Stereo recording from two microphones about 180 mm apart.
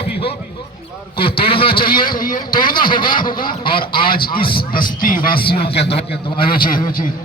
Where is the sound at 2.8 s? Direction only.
25° left (ahead or behind).